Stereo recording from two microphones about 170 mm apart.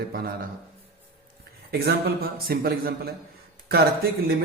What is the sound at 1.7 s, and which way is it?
A man's voice, 65° right (ahead or behind).